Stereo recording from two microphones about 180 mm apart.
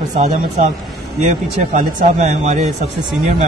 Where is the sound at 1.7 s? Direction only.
45° right (ahead or behind).